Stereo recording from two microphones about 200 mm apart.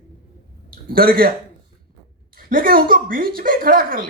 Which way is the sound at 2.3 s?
45° right (ahead or behind).